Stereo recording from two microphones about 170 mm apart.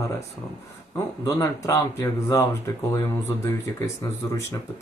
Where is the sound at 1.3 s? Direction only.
15° left (ahead or behind).